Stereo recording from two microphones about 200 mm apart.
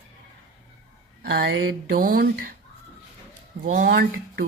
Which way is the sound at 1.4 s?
75° right (ahead or behind).